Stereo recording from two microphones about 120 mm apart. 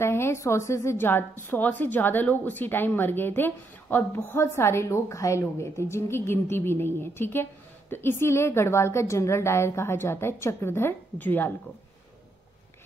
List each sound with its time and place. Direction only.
0.0 s a woman's voice: 20° left (ahead or behind)